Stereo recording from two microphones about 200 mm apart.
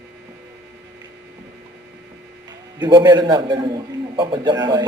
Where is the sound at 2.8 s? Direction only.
20° right (ahead or behind).